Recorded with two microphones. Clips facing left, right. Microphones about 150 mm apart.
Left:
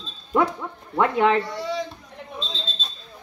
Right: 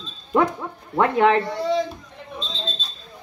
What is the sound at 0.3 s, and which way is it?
Speech, 10° right (ahead or behind).